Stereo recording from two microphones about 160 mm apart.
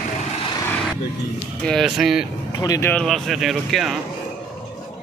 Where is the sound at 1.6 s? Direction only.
Centre (ahead or behind).